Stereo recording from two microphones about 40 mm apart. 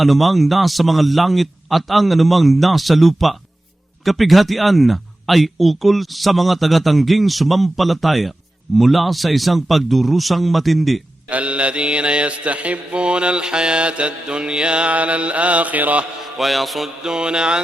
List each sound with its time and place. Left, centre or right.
0.0 s speech: centre
11.3 s mantra: right
16.2 s speech: centre
17.0 s mantra: centre